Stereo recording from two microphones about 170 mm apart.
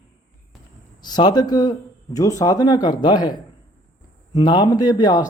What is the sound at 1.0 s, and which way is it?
Speech, 25° left (ahead or behind).